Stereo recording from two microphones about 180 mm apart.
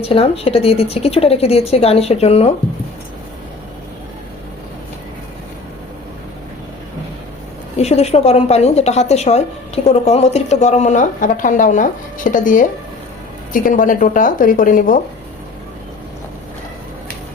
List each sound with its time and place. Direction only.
0.0 s a woman's voice: 30° left (ahead or behind)
7.8 s a woman's voice: 35° left (ahead or behind)